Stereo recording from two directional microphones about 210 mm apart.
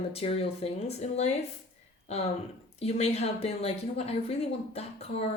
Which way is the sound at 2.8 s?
30° left (ahead or behind).